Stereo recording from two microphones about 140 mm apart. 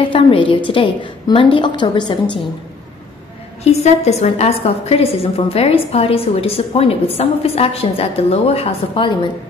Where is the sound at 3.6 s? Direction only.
50° left (ahead or behind).